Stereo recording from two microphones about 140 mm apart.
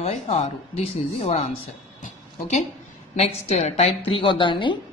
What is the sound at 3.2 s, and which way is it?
A woman's voice, 50° left (ahead or behind).